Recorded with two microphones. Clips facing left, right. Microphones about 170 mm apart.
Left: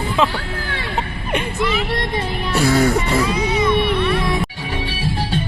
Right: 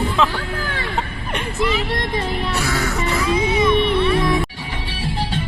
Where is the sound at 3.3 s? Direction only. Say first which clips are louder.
Right 1 dB; 25° right (ahead or behind).